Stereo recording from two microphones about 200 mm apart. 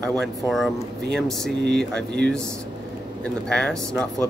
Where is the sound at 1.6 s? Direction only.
55° right (ahead or behind).